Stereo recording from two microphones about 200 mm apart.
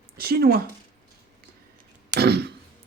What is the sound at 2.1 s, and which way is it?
Throat clearing, 50° right (ahead or behind).